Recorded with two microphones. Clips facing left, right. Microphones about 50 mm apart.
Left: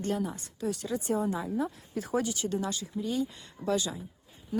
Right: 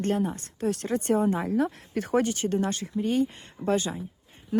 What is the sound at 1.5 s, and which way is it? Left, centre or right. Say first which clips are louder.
Speech: right 6 dB; right.